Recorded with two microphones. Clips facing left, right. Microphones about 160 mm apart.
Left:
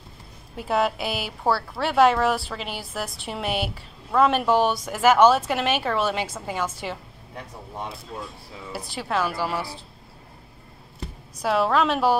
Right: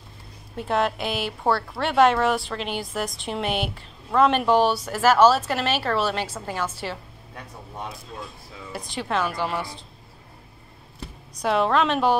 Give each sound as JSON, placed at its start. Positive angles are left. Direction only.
{"t": 0.6, "sound": "a woman's voice", "side_deg": 5}
{"t": 8.7, "sound": "a woman's voice", "side_deg": 5}
{"t": 11.4, "sound": "speech", "side_deg": 5}